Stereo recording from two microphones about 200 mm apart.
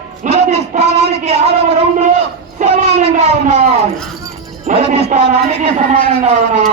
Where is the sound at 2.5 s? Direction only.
35° right (ahead or behind).